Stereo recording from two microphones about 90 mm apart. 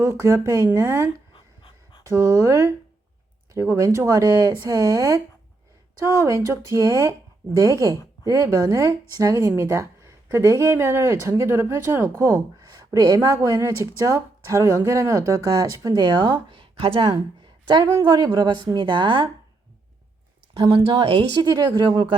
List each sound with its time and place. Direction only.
0.0 s speech: 35° right (ahead or behind)
0.4 s speech: 50° right (ahead or behind)
1.3 s dog: 75° left (ahead or behind)
2.0 s speech: 35° right (ahead or behind)
12.9 s speech: 45° right (ahead or behind)
16.5 s a sound: 90° right
18.0 s a woman's voice: 55° right (ahead or behind)
20.5 s a woman's voice: 85° right; by 22.2 s 65° right (ahead or behind)